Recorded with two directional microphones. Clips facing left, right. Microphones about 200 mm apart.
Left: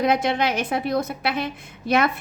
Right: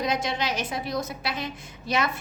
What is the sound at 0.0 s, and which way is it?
A woman's voice, 60° left (ahead or behind).